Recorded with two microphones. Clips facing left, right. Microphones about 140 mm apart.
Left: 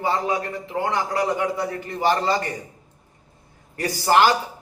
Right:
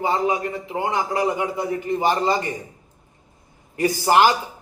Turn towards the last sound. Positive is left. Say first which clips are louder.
# right 1 dB
turn(degrees=-15)  # may be behind; listen again after turning